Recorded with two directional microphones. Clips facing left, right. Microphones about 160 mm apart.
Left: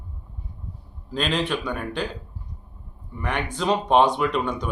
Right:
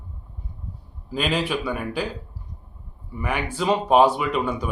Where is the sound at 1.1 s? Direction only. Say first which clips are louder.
Right 1 dB; 10° right (ahead or behind).